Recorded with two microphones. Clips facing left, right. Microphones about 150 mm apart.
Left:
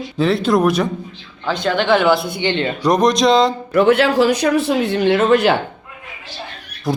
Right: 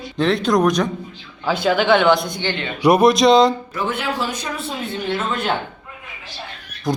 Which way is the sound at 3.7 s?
70° left (ahead or behind).